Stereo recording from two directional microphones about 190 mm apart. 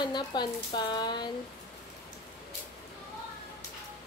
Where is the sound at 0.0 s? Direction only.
25° left (ahead or behind).